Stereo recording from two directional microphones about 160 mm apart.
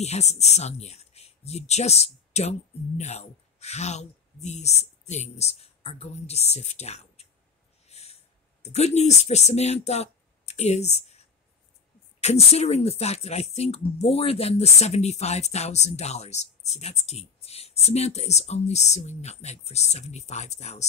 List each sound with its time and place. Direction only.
0.0 s speech: 45° left (ahead or behind)
7.8 s snort: 40° left (ahead or behind)
8.6 s speech: 45° left (ahead or behind)